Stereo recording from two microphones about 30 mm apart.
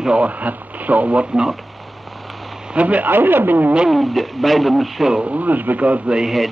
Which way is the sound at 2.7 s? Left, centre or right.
Right.